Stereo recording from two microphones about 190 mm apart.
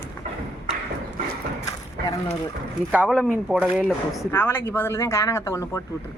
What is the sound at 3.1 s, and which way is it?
Speech, 5° left (ahead or behind).